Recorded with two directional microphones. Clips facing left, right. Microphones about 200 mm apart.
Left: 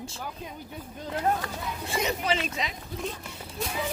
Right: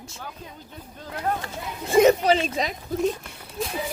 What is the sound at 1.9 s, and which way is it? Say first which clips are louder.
Speech: right 12 dB; 40° right (ahead or behind).